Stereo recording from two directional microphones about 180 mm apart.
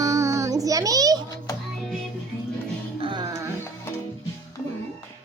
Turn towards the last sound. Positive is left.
turn(degrees=-15)  # may be behind; listen again after turning